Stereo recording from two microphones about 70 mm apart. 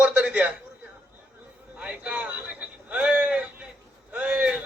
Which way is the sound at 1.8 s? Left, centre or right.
Centre.